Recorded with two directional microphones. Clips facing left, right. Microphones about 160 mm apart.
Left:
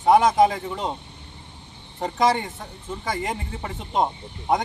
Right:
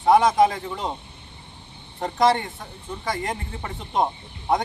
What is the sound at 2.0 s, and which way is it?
Speech, centre (ahead or behind).